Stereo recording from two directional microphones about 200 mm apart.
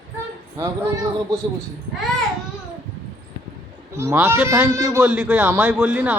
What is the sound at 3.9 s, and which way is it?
A man's voice, 10° right (ahead or behind).